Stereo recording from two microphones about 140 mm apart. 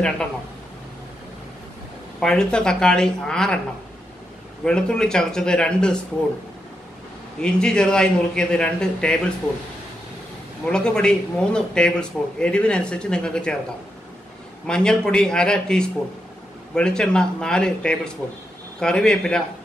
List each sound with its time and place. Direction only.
2.1 s a man's voice: 5° left (ahead or behind)
4.6 s a man's voice: 5° left (ahead or behind)
7.4 s a man's voice: 5° left (ahead or behind)
10.6 s speech: 5° left (ahead or behind)
14.7 s a man's voice: 5° left (ahead or behind)